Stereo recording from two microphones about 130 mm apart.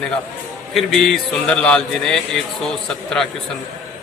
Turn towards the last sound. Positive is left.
turn(degrees=5)  # may be behind; listen again after turning